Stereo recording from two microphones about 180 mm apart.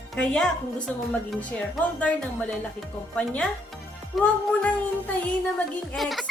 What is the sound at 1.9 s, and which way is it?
A woman's voice, 5° left (ahead or behind).